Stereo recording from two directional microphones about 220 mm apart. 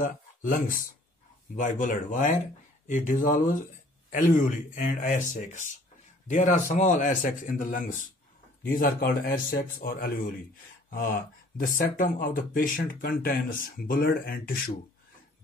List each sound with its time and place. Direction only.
0.0 s speech: 40° left (ahead or behind)